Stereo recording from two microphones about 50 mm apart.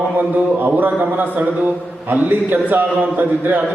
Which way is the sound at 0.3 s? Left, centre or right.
Right.